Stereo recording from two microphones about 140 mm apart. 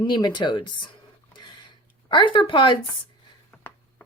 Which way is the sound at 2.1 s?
35° left (ahead or behind).